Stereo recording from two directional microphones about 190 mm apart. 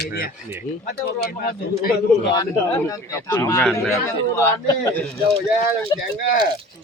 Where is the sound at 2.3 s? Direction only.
20° left (ahead or behind).